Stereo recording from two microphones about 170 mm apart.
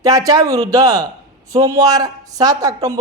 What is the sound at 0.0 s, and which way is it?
Speech, 20° right (ahead or behind).